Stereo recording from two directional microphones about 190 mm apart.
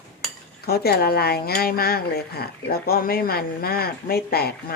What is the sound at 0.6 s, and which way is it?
Speech, 55° left (ahead or behind).